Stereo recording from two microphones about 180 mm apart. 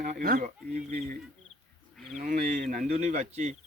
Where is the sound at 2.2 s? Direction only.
50° right (ahead or behind).